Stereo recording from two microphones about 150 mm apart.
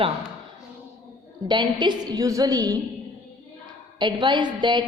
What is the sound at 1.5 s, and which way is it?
A woman's voice, 30° right (ahead or behind).